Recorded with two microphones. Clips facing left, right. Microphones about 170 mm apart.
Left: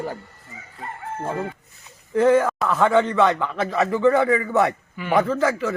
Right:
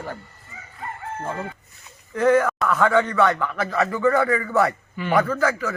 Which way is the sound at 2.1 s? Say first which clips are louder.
Left 1 dB; 25° left (ahead or behind).